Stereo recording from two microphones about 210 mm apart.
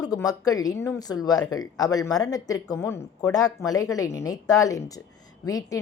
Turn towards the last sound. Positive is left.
turn(degrees=15)  # may be behind; listen again after turning